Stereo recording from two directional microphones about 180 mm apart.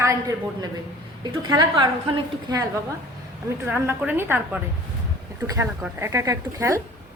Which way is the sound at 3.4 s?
15° right (ahead or behind).